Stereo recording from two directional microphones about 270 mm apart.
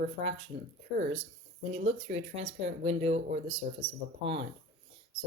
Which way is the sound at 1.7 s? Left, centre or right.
Right.